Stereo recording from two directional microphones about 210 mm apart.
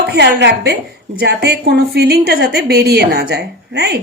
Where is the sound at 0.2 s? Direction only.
55° right (ahead or behind).